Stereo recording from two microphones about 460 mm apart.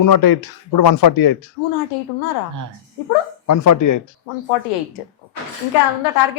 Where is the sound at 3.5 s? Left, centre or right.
Left.